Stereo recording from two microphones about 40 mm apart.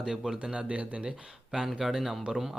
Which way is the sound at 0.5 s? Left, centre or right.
Right.